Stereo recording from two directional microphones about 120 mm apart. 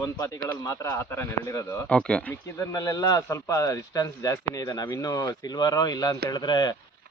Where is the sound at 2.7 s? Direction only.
30° left (ahead or behind).